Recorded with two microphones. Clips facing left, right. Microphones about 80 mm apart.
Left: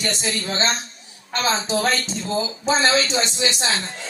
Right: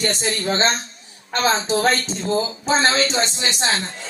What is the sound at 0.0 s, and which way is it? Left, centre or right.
A man's voice, right.